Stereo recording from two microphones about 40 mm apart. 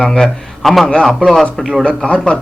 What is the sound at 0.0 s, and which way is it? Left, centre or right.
Speech, centre.